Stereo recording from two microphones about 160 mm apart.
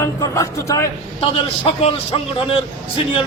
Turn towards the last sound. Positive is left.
turn(degrees=35)  # may be behind; listen again after turning